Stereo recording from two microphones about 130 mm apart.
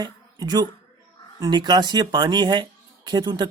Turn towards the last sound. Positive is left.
turn(degrees=-30)  # may be behind; listen again after turning